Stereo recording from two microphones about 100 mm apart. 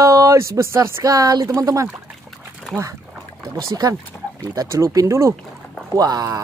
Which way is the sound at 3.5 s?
35° right (ahead or behind).